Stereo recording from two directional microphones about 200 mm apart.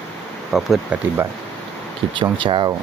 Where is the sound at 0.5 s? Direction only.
Centre (ahead or behind).